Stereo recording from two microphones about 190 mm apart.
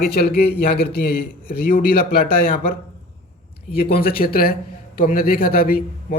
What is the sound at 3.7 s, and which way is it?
A man's voice, 50° left (ahead or behind).